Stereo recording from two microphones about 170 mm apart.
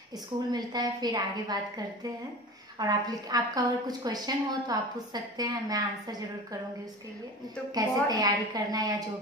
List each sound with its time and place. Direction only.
0.5 s a woman's voice: 25° right (ahead or behind)
7.7 s a woman's voice: 25° right (ahead or behind)